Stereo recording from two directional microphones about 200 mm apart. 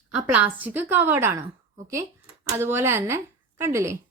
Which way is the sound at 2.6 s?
10° right (ahead or behind).